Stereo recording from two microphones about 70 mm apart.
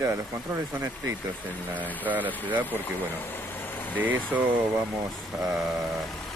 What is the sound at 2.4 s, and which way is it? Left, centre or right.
Speech, right.